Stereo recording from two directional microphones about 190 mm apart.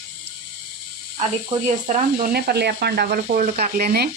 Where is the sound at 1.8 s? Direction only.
45° right (ahead or behind).